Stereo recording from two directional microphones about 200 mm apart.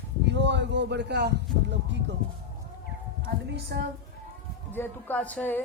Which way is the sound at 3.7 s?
55° right (ahead or behind).